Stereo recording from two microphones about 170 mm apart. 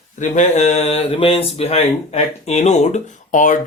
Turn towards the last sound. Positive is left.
turn(degrees=50)  # may be behind; listen again after turning